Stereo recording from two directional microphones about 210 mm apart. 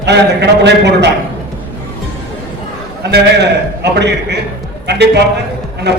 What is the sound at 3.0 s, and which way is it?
A man's voice, 50° right (ahead or behind).